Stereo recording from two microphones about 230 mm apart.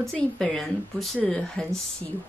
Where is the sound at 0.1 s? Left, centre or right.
Centre.